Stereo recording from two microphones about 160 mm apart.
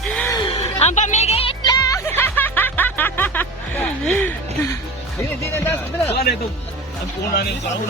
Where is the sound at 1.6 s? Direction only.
20° left (ahead or behind).